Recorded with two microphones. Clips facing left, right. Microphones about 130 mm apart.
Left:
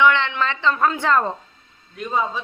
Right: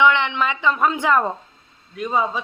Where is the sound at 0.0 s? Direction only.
20° right (ahead or behind).